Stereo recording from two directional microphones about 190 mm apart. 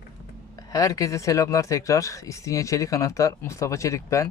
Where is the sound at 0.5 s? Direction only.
15° left (ahead or behind).